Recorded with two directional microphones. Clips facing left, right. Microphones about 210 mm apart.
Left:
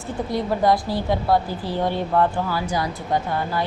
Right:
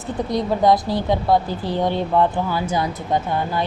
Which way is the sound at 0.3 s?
20° right (ahead or behind).